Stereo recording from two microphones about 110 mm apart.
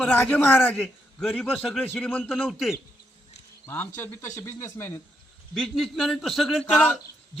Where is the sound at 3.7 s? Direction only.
20° left (ahead or behind).